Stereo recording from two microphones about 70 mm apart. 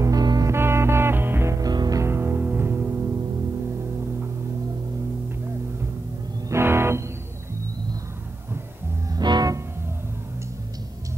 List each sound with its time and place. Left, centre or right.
0.0 s music: right
0.5 s music: right
1.7 s music: right
2.0 s music: right
6.5 s music: right
9.1 s music: right